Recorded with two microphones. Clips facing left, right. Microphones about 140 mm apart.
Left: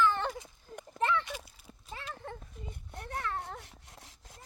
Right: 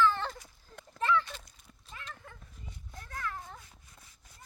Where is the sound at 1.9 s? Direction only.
30° left (ahead or behind).